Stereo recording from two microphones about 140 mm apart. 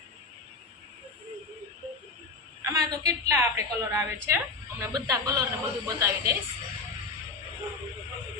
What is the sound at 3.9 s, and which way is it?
Speech, 20° right (ahead or behind).